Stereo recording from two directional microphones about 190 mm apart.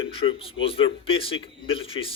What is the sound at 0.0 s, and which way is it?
A man's voice, 30° left (ahead or behind).